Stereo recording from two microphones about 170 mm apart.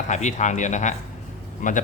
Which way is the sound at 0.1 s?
45° left (ahead or behind).